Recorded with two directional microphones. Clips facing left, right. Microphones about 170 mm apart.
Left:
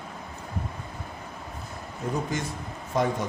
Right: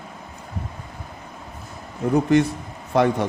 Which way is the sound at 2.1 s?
65° right (ahead or behind).